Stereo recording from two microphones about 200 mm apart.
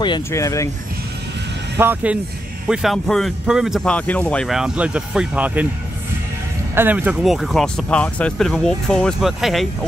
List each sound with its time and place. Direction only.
0.0 s speech: 20° left (ahead or behind)
1.8 s speech: 10° right (ahead or behind)
6.7 s speech: 10° right (ahead or behind)